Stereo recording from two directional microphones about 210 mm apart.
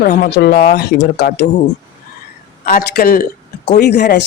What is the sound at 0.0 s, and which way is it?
A woman's voice, 45° left (ahead or behind).